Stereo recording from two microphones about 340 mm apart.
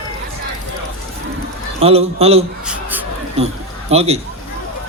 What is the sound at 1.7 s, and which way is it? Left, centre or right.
Speech, centre.